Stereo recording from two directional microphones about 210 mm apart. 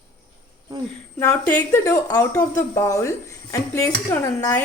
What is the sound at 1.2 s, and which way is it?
A woman's voice, 15° left (ahead or behind).